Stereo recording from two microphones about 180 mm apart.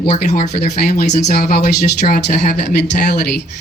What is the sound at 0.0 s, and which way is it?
Speech, 30° left (ahead or behind).